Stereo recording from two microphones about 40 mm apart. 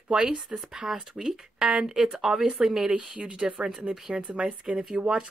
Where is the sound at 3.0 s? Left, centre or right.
Right.